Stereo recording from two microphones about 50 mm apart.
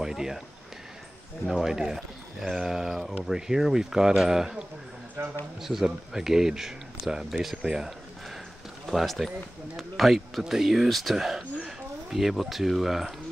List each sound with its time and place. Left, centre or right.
0.0 s speech: centre
1.5 s speech: centre
5.2 s a man's voice: right
5.6 s speech: centre
8.8 s speech: centre